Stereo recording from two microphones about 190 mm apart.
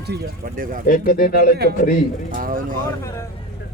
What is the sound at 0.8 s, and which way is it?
Speech, 50° left (ahead or behind).